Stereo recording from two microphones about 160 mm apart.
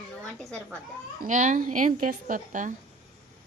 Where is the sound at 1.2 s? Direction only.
50° right (ahead or behind).